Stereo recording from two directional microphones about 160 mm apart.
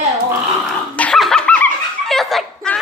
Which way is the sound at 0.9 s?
5° left (ahead or behind).